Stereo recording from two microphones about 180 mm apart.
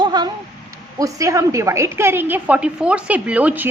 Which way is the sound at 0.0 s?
25° right (ahead or behind).